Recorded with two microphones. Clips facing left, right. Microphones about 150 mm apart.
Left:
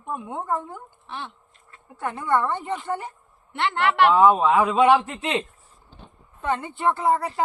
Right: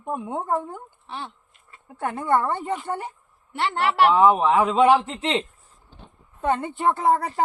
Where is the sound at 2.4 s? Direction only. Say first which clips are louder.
Right 1 dB; 10° right (ahead or behind).